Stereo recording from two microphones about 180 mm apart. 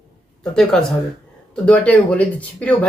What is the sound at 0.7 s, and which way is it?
Speech, 5° left (ahead or behind).